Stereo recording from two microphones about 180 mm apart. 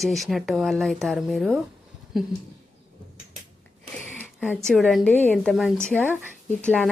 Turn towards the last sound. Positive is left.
turn(degrees=5)  # may be behind; listen again after turning